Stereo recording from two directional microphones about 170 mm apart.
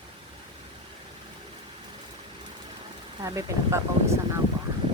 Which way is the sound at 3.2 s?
20° right (ahead or behind).